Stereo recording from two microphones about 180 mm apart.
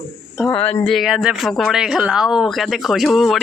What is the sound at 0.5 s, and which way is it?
Speech, 35° left (ahead or behind).